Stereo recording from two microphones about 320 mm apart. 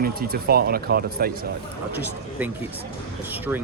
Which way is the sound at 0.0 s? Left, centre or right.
Right.